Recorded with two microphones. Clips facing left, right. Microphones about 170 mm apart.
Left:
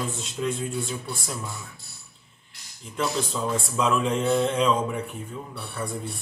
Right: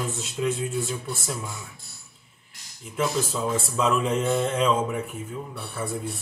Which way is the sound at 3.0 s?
5° right (ahead or behind).